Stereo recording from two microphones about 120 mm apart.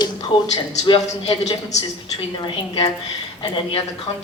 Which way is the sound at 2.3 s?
40° left (ahead or behind).